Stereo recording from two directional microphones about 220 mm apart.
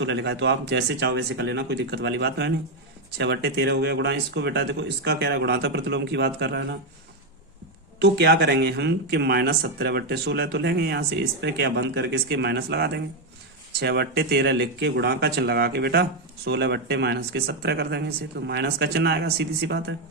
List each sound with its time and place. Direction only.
0.0 s speech: 55° right (ahead or behind)
7.9 s speech: 50° right (ahead or behind)